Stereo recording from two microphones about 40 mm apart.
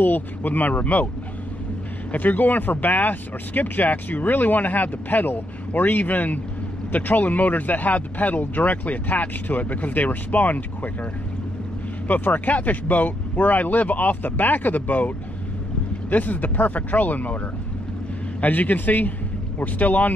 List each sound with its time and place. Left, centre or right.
0.0 s speech: left
2.1 s speech: left
12.1 s speech: left
18.4 s speech: left